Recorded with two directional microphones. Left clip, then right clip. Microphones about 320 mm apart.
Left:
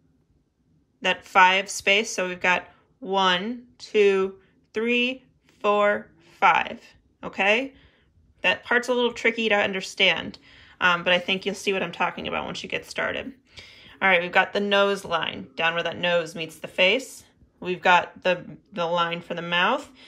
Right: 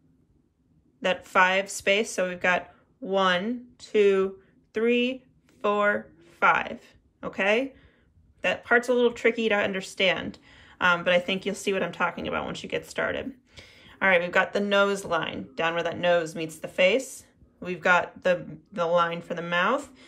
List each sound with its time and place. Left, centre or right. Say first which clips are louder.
1.0 s speech: left 4 dB; centre